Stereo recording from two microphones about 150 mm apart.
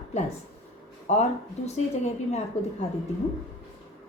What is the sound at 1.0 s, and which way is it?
Speech, 50° left (ahead or behind).